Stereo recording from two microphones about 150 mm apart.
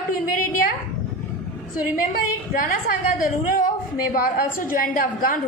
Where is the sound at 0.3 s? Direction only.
65° left (ahead or behind).